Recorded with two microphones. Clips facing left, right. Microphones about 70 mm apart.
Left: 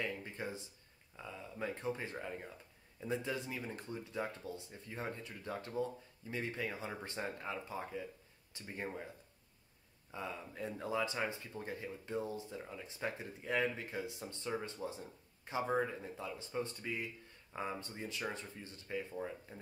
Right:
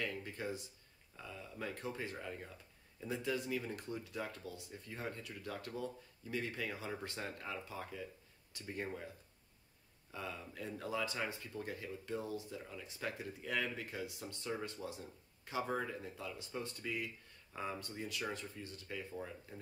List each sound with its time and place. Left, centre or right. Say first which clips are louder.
0.0 s a sound: even; left
1.1 s speech: left 2 dB; left
10.1 s speech: left 2 dB; left